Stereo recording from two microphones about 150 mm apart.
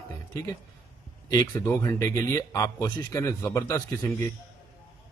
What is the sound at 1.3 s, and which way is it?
Speech, 20° left (ahead or behind).